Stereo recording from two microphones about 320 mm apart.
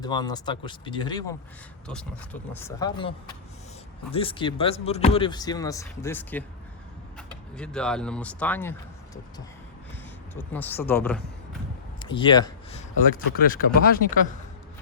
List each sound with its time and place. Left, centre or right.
0.0 s speech: centre
10.3 s speech: centre
11.9 s speech: centre
13.1 s speech: left